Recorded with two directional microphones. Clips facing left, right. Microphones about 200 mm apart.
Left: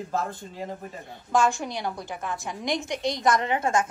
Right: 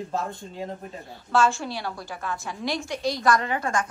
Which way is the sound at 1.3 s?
15° left (ahead or behind).